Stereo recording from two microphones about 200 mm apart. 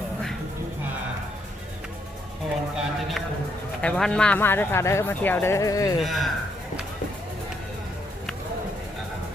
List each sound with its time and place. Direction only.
2.7 s a sound: centre (ahead or behind)
3.8 s speech: 5° left (ahead or behind)
6.0 s speech: centre (ahead or behind)